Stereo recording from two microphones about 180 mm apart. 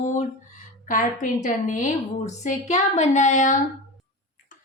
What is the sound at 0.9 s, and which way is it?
A woman's voice, 45° left (ahead or behind).